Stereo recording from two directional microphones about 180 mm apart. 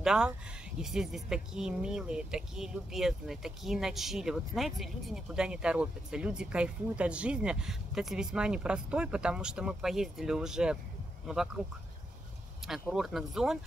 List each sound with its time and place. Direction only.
0.0 s speech: 5° right (ahead or behind)
12.9 s speech: centre (ahead or behind)